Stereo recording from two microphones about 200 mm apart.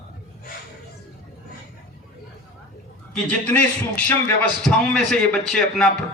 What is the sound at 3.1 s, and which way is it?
A man's voice, 5° left (ahead or behind).